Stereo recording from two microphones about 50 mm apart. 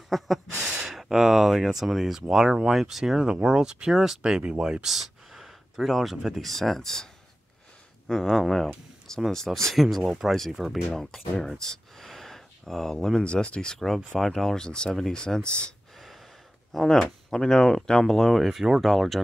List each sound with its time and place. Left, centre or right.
0.1 s speech: centre
4.2 s speech: right
4.8 s speech: centre
8.1 s speech: centre
11.3 s a sound: centre
13.2 s speech: left
13.7 s speech: centre
16.0 s gasp: centre
16.7 s speech: centre
18.4 s speech: centre